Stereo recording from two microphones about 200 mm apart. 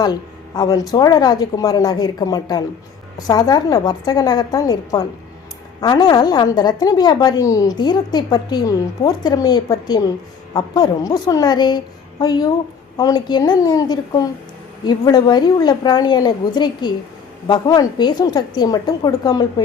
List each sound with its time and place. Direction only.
0.5 s a woman's voice: 20° left (ahead or behind)